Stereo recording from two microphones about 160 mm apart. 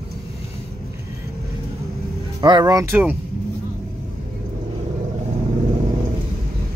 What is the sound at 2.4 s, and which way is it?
Speech, 25° right (ahead or behind).